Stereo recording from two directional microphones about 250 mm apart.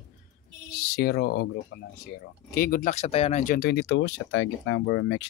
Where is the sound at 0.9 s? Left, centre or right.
Left.